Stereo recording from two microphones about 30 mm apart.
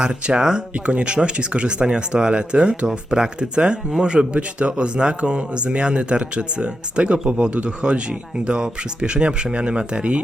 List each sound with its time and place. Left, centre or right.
0.0 s speech: right
0.9 s speech: right
3.1 s speech: right
3.5 s speech: right